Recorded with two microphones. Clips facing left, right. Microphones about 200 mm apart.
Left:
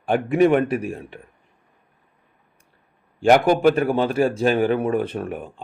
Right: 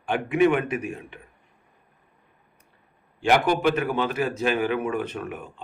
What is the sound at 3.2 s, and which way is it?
A man's voice, 40° left (ahead or behind).